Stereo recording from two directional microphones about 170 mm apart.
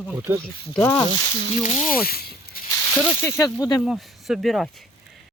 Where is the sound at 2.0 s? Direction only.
60° left (ahead or behind).